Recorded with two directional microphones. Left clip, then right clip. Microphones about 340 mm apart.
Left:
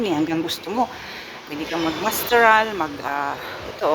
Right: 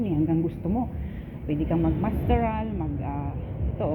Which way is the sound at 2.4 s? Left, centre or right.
Left.